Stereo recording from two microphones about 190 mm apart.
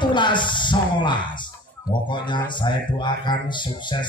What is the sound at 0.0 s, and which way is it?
Speech, 25° left (ahead or behind).